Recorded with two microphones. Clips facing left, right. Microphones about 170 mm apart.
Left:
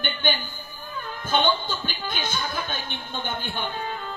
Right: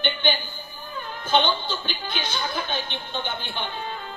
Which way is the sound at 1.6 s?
45° left (ahead or behind).